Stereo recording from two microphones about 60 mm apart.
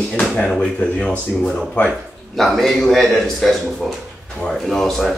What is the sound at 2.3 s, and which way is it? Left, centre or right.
Speech, centre.